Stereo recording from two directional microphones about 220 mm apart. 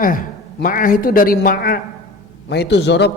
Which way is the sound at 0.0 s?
40° left (ahead or behind).